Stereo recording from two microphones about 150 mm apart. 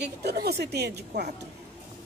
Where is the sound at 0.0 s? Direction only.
90° right.